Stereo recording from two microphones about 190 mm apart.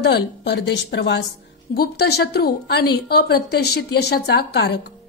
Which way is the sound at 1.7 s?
55° left (ahead or behind).